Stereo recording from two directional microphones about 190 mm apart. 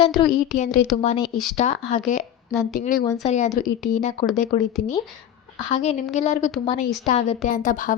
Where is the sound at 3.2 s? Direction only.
40° left (ahead or behind).